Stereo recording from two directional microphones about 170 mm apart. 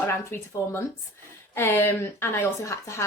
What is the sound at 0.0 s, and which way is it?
Speech, 15° left (ahead or behind).